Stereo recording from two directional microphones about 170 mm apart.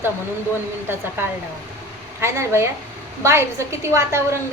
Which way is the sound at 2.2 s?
15° right (ahead or behind).